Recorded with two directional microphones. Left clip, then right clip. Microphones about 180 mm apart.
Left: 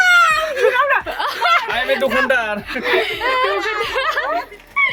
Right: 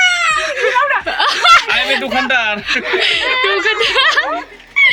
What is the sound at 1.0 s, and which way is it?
Snicker, 35° right (ahead or behind).